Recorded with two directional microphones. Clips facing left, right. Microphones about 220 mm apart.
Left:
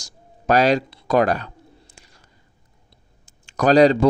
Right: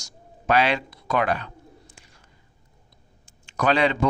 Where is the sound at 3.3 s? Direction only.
40° left (ahead or behind).